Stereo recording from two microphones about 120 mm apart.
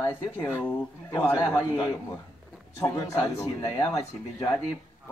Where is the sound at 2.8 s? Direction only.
25° left (ahead or behind).